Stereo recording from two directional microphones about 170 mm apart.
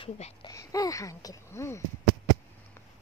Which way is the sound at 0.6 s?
20° left (ahead or behind).